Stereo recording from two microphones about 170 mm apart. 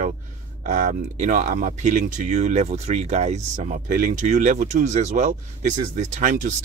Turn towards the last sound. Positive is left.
turn(degrees=-45)  # may be behind; listen again after turning